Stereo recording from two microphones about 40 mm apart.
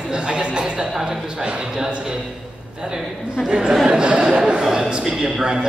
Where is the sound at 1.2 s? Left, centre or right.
Right.